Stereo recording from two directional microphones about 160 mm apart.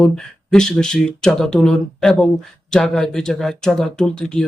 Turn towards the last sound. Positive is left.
turn(degrees=5)  # may be behind; listen again after turning